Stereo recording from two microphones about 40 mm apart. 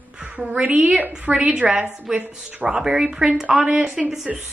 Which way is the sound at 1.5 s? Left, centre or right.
Centre.